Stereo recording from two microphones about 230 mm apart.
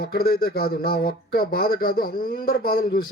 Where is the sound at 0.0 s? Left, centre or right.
Left.